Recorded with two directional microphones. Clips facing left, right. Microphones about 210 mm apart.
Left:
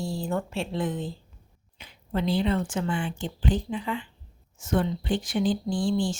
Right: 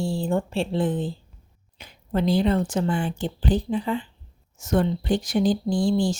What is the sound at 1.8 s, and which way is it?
Speech, 45° right (ahead or behind).